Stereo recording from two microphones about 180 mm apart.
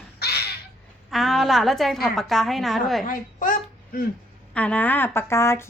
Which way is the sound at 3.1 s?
45° left (ahead or behind).